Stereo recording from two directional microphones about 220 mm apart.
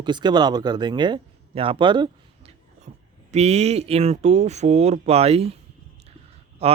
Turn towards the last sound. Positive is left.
turn(degrees=-25)  # may be behind; listen again after turning